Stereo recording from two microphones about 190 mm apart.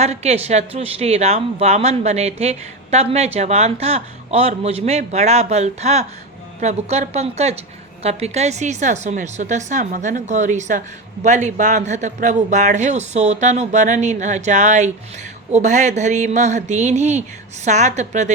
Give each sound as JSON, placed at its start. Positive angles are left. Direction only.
{"t": 0.0, "sound": "a woman's voice", "side_deg": -35}